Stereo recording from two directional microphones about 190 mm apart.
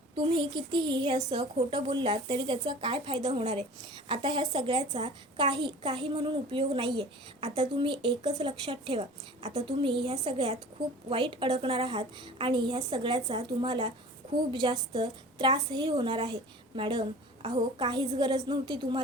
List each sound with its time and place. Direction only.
0.2 s a child's voice: 25° right (ahead or behind)